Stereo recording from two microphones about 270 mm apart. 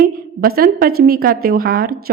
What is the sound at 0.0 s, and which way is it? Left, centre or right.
A woman's voice, right.